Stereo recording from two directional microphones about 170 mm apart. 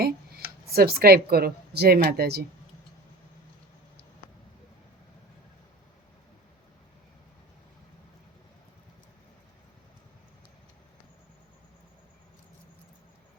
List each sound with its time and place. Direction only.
0.0 s speech: 65° right (ahead or behind)